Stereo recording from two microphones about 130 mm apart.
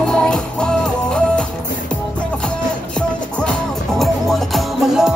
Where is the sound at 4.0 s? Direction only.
Centre (ahead or behind).